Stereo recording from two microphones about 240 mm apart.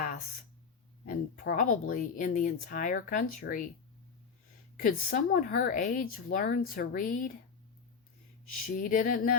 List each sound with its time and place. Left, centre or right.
1.0 s speech: left
4.8 s speech: left
8.6 s speech: left